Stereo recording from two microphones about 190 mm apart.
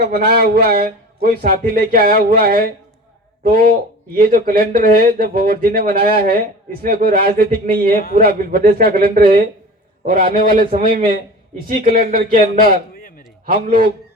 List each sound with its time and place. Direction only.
0.0 s speech: 55° right (ahead or behind)
12.9 s a sound: 50° left (ahead or behind)
13.4 s speech: 45° right (ahead or behind)